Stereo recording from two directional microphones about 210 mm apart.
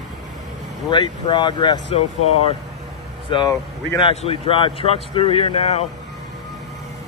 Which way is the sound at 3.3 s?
20° left (ahead or behind).